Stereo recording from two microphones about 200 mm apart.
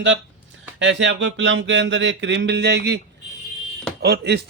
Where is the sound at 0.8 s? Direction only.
65° right (ahead or behind).